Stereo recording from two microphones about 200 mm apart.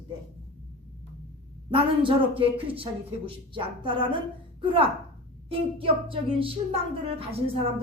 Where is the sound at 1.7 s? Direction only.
25° right (ahead or behind).